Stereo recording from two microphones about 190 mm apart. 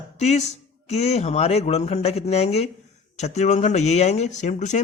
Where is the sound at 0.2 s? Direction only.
35° left (ahead or behind).